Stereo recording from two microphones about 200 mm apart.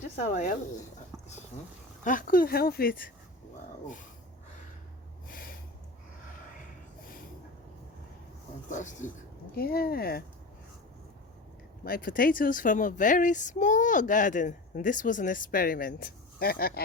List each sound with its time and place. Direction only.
0.0 s speech: 40° left (ahead or behind)
2.0 s speech: 45° left (ahead or behind)
5.3 s a sound: 45° left (ahead or behind)
8.7 s a woman's voice: 40° left (ahead or behind)
11.8 s a woman's voice: 45° left (ahead or behind)